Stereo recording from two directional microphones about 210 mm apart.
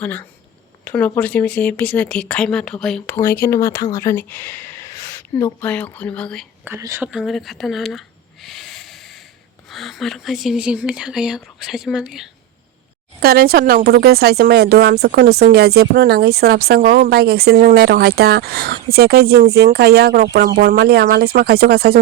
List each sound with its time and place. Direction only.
0.0 s speech: 10° left (ahead or behind)
6.7 s speech: 15° right (ahead or behind)
7.1 s a sound: centre (ahead or behind)
9.6 s speech: centre (ahead or behind)
13.1 s speech: 45° right (ahead or behind)